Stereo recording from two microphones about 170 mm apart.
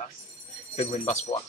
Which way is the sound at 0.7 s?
40° left (ahead or behind).